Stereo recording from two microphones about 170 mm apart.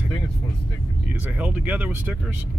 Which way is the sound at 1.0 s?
10° right (ahead or behind).